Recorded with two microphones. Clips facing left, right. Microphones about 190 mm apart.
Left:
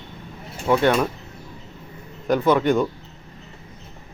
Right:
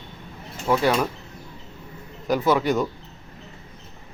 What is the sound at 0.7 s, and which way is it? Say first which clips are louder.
Speech: left 2 dB; 5° right (ahead or behind).